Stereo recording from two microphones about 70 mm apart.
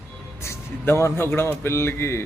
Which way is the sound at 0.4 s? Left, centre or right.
Left.